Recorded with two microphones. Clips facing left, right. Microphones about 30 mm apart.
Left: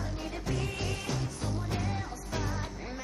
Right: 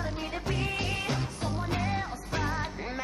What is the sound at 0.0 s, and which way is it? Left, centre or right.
Music, right.